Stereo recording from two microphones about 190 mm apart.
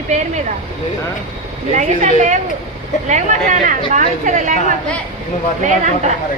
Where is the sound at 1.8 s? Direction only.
40° right (ahead or behind).